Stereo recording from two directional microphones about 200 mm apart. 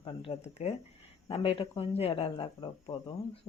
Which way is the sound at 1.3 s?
30° left (ahead or behind).